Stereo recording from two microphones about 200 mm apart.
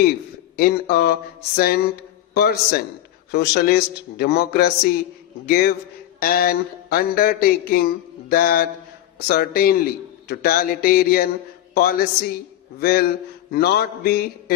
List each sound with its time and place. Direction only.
0.5 s a man's voice: 50° left (ahead or behind)
2.3 s a man's voice: 55° left (ahead or behind)